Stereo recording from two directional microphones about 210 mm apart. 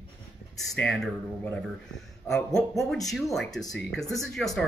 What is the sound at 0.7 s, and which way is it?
Speech, 5° left (ahead or behind).